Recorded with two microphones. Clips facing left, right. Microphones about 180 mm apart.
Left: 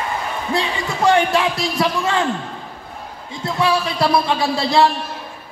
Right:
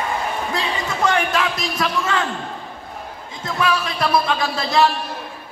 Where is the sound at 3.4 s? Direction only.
30° left (ahead or behind).